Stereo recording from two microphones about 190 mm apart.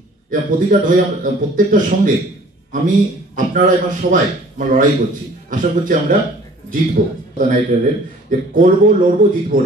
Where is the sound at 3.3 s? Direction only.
45° right (ahead or behind).